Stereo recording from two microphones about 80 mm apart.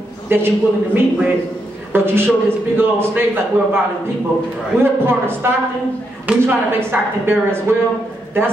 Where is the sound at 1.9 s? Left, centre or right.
Right.